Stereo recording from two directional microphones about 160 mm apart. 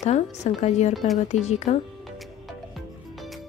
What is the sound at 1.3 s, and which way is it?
Speech, 45° left (ahead or behind).